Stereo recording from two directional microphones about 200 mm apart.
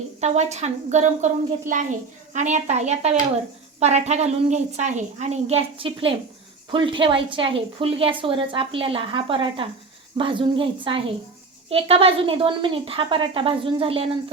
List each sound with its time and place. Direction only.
0.2 s a woman's voice: 35° right (ahead or behind)